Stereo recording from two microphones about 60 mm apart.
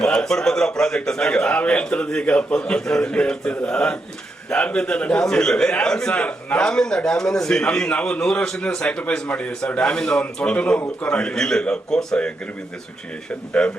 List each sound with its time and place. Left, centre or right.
0.0 s a man's voice: centre
13.5 s a man's voice: centre